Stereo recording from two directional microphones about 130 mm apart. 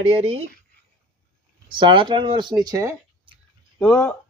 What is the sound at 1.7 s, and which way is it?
Speech, 40° right (ahead or behind).